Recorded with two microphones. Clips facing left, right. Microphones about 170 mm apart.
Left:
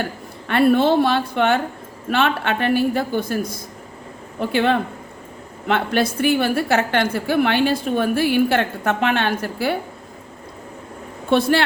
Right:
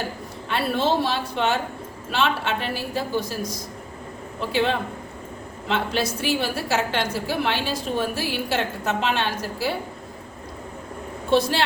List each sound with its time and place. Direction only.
0.4 s a woman's voice: 55° left (ahead or behind)
11.3 s a woman's voice: 55° left (ahead or behind)